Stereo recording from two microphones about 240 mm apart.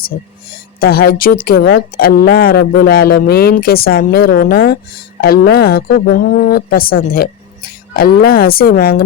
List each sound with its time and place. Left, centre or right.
0.5 s speech: left